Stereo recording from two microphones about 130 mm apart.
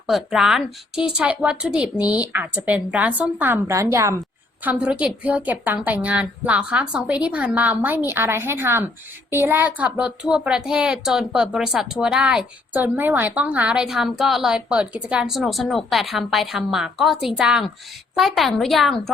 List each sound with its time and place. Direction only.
0.1 s speech: 5° right (ahead or behind)
3.7 s a woman's voice: 25° right (ahead or behind)
4.6 s speech: 10° right (ahead or behind)